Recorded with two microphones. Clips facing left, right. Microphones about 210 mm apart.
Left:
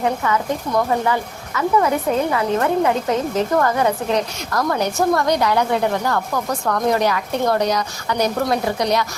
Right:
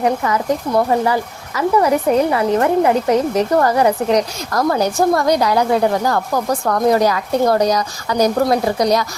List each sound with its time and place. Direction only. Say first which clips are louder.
0.2 s a woman's voice: right 3 dB; 35° right (ahead or behind)